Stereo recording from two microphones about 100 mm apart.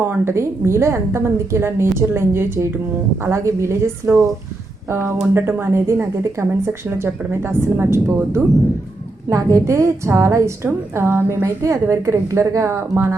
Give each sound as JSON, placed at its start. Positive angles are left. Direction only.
{"t": 0.0, "sound": "a woman's voice", "side_deg": -25}